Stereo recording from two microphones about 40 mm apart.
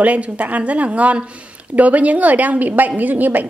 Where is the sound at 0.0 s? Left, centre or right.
Right.